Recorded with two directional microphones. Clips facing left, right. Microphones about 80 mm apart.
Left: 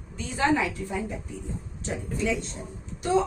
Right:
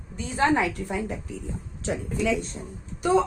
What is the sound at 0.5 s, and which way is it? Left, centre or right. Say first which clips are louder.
Speech: right 2 dB; right.